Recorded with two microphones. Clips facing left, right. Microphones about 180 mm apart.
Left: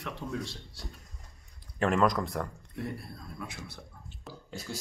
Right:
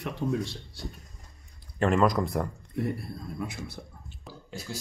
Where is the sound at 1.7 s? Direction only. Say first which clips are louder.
Right 3 dB; centre (ahead or behind).